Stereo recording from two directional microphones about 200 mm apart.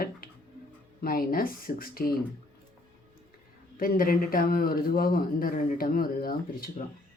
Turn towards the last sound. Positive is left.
turn(degrees=45)  # may be behind; listen again after turning